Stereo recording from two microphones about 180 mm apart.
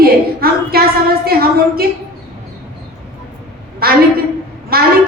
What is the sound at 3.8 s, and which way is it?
Speech, 55° right (ahead or behind).